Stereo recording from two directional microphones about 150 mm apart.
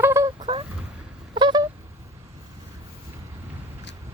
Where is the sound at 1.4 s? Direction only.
30° right (ahead or behind).